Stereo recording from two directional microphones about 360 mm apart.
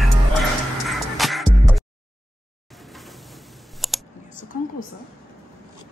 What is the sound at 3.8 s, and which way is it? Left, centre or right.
Computer keyboard, centre.